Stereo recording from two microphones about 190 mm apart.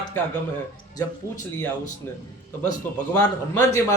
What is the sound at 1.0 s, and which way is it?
Mantra, 20° left (ahead or behind).